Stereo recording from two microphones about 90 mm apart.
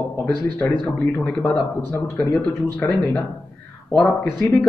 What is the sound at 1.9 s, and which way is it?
Speech, 25° left (ahead or behind).